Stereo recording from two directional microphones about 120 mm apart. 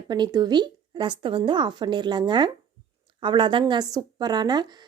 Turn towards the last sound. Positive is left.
turn(degrees=-35)  # may be behind; listen again after turning